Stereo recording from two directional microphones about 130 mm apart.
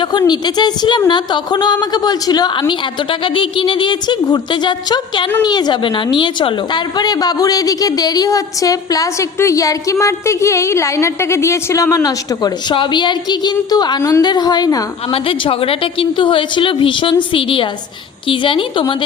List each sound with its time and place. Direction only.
0.0 s a woman's voice: 35° left (ahead or behind)
15.1 s a woman's voice: 45° left (ahead or behind)